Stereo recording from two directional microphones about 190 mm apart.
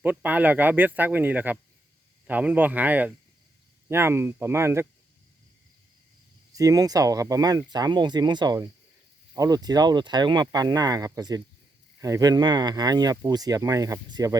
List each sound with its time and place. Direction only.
0.0 s speech: 10° right (ahead or behind)
6.5 s speech: 20° right (ahead or behind)